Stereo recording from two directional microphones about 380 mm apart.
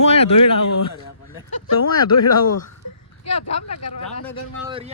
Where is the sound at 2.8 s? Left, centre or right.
Left.